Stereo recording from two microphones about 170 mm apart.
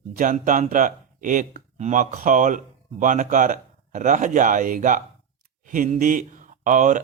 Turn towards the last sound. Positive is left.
turn(degrees=-50)  # may be behind; listen again after turning